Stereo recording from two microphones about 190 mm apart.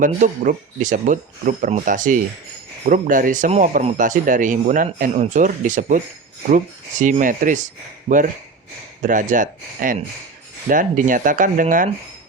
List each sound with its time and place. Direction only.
0.0 s speech: 40° right (ahead or behind)
7.0 s speech: 45° right (ahead or behind)
9.0 s speech: 45° right (ahead or behind)